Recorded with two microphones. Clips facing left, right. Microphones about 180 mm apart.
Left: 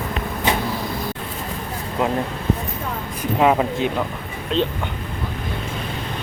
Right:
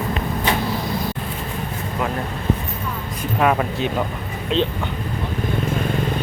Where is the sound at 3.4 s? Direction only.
20° left (ahead or behind).